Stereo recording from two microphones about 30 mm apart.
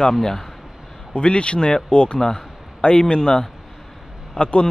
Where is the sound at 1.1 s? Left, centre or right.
Left.